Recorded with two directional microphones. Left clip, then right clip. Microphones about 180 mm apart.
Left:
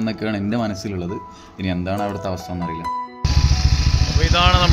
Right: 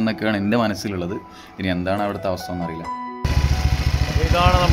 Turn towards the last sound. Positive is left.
turn(degrees=-5)  # may be behind; listen again after turning